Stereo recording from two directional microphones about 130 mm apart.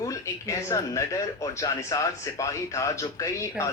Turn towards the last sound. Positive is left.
turn(degrees=25)  # may be behind; listen again after turning